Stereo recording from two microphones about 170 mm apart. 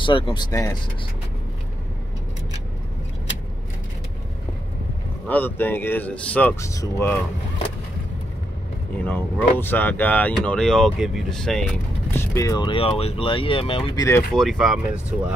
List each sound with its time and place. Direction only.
0.0 s speech: 30° left (ahead or behind)
5.3 s speech: 10° left (ahead or behind)
8.9 s speech: 10° left (ahead or behind)
12.1 s speech: 15° left (ahead or behind); by 14.0 s 30° left (ahead or behind)
14.3 s speech: centre (ahead or behind)